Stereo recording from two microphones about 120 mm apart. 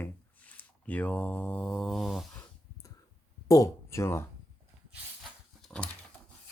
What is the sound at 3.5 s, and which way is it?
Speech, 25° left (ahead or behind).